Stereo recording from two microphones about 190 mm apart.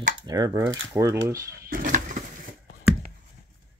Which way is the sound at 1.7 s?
45° right (ahead or behind).